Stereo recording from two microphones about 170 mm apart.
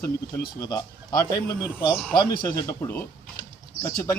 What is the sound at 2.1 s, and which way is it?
Speech, 20° left (ahead or behind).